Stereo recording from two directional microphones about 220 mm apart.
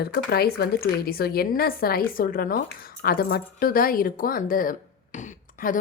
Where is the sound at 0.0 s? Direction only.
45° left (ahead or behind).